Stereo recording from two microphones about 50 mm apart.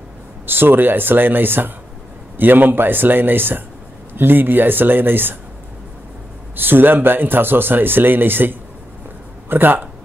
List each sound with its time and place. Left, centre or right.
0.5 s a man's voice: right
6.5 s a man's voice: right